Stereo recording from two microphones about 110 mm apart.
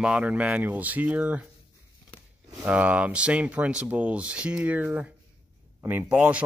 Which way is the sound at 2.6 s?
10° right (ahead or behind).